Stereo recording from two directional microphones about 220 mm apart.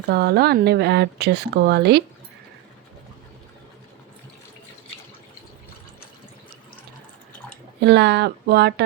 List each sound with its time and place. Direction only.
0.1 s speech: 45° right (ahead or behind)
7.8 s speech: 50° right (ahead or behind)